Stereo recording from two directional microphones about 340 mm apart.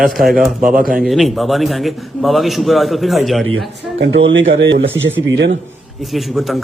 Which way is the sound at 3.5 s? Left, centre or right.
Right.